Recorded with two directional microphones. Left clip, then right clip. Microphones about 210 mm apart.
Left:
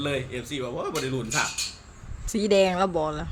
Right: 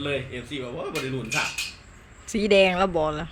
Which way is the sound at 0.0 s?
35° left (ahead or behind).